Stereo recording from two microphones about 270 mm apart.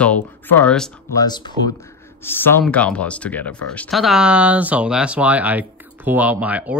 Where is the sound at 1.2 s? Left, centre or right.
Centre.